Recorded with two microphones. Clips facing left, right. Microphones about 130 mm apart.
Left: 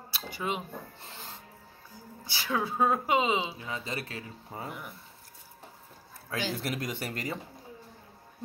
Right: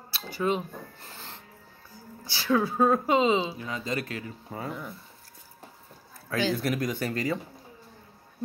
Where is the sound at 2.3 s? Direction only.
20° left (ahead or behind).